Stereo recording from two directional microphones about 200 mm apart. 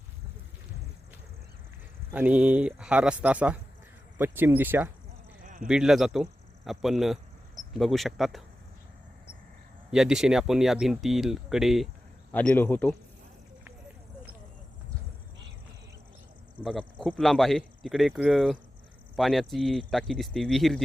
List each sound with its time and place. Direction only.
2.1 s speech: 5° right (ahead or behind)
5.4 s a sound: 40° right (ahead or behind)
5.6 s speech: 5° right (ahead or behind)
9.9 s a man's voice: 5° right (ahead or behind)
16.6 s speech: centre (ahead or behind)